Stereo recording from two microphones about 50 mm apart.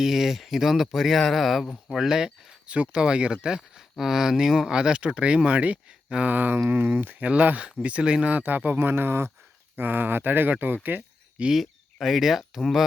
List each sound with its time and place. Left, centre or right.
0.0 s speech: centre
2.6 s speech: right; by 4.7 s centre
4.7 s speech: centre
6.3 s speech: right
9.7 s speech: right
11.5 s speech: centre